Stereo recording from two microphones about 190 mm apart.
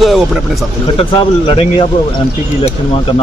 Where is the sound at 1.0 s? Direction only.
30° left (ahead or behind).